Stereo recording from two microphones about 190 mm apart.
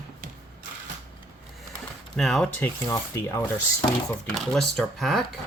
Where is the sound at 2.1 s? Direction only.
Centre (ahead or behind).